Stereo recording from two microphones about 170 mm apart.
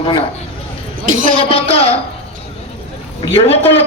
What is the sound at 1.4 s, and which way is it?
Speech, 35° left (ahead or behind).